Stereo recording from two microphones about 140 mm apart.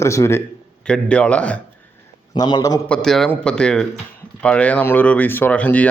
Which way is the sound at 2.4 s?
30° left (ahead or behind).